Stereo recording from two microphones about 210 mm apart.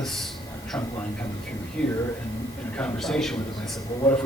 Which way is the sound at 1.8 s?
5° left (ahead or behind).